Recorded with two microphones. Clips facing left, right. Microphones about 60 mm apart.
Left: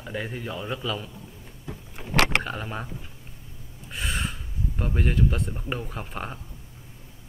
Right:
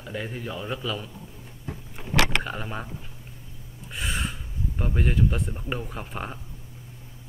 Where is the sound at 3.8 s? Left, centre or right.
Centre.